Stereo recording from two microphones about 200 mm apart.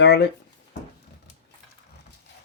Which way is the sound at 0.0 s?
55° left (ahead or behind).